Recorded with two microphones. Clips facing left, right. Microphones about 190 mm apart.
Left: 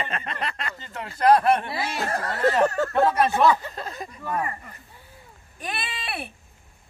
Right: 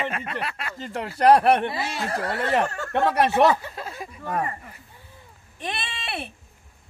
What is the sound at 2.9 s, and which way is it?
Speech, 70° right (ahead or behind).